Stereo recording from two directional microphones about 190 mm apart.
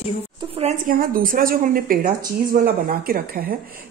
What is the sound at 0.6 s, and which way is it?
A woman's voice, 40° right (ahead or behind).